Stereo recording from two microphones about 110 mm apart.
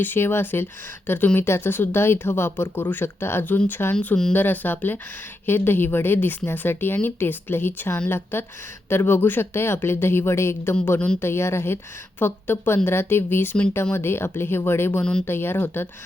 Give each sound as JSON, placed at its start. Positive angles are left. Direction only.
{"t": 0.0, "sound": "speech", "side_deg": 20}
{"t": 3.9, "sound": "speech", "side_deg": 10}